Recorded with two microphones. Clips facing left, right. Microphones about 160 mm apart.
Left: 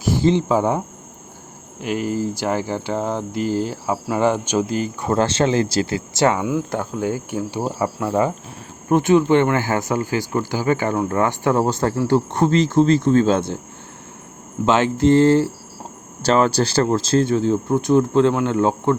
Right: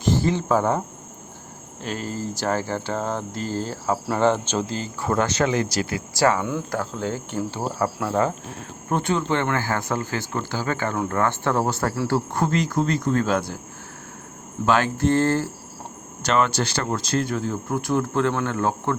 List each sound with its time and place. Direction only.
0.0 s cricket: 10° left (ahead or behind)
0.3 s speech: 15° left (ahead or behind)
1.8 s speech: 15° left (ahead or behind)
5.1 s speech: 30° left (ahead or behind)
14.7 s speech: 20° left (ahead or behind)
16.2 s speech: 35° left (ahead or behind); by 18.9 s 20° left (ahead or behind)